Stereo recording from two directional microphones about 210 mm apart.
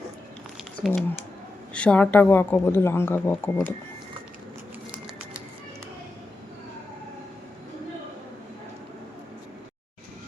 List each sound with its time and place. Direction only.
0.8 s speech: 5° left (ahead or behind)